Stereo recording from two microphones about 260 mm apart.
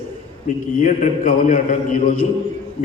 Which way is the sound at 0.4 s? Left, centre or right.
Left.